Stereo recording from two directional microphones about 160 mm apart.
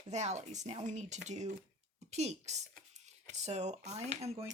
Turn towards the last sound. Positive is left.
turn(degrees=-45)  # may be behind; listen again after turning